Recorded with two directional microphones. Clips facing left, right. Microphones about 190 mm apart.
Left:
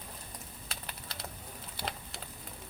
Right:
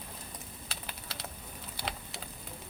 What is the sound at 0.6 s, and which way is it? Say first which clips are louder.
Typing: even; centre (ahead or behind).